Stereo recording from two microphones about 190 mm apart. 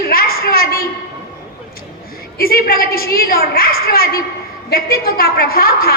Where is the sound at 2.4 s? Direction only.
50° left (ahead or behind).